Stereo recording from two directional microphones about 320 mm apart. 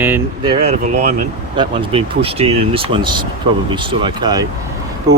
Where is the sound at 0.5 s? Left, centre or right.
Right.